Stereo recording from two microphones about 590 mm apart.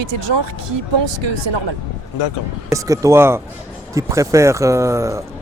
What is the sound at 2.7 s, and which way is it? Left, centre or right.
Speech, centre.